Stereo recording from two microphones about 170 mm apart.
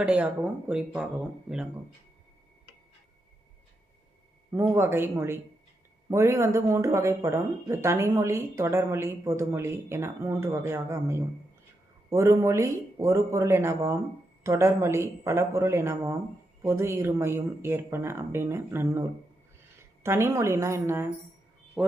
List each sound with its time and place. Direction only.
0.0 s speech: 10° right (ahead or behind)
4.5 s speech: 15° right (ahead or behind)